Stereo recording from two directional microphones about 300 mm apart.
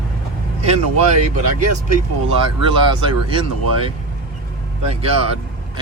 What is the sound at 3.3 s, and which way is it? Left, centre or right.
Speech, centre.